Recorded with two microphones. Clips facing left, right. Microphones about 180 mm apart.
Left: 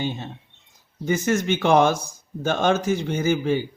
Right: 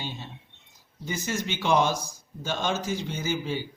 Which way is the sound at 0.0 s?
55° left (ahead or behind).